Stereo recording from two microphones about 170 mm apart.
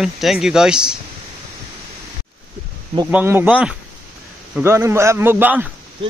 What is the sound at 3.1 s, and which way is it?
Speech, 10° right (ahead or behind).